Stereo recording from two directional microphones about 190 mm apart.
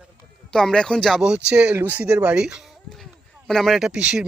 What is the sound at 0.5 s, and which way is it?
Speech, 5° left (ahead or behind).